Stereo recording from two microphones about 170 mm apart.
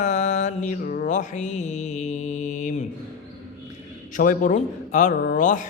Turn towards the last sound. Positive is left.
turn(degrees=50)  # may be behind; listen again after turning